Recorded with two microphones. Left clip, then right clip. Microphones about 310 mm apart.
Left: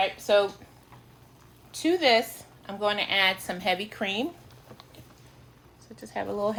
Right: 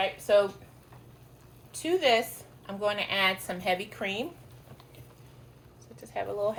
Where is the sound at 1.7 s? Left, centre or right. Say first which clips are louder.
Left 3 dB; left.